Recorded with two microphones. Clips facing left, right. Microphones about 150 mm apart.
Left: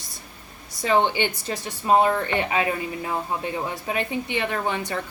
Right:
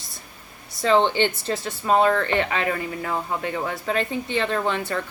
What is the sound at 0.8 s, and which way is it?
Speech, 15° left (ahead or behind).